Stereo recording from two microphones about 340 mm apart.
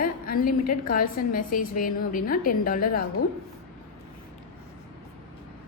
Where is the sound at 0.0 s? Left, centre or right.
Left.